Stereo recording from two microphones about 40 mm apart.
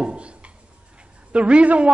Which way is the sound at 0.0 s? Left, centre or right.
Right.